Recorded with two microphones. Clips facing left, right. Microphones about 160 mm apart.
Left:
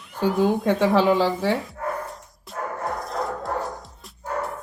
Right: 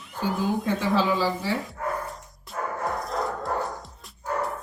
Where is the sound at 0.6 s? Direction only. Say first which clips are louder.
Left 5 dB; 60° left (ahead or behind).